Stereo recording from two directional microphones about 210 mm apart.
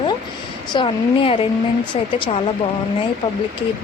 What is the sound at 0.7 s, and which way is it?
Speech, 25° left (ahead or behind).